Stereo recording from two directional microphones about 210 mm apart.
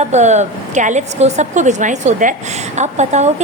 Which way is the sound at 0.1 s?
35° right (ahead or behind).